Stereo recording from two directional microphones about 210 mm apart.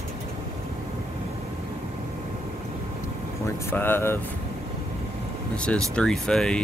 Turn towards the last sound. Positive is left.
turn(degrees=5)  # may be behind; listen again after turning